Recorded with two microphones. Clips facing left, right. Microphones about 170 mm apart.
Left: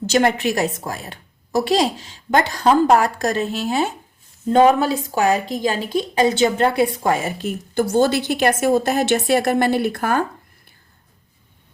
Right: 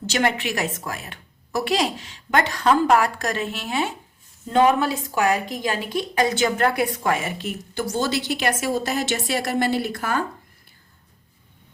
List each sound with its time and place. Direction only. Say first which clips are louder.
0.0 s a woman's voice: left 6 dB; 40° left (ahead or behind)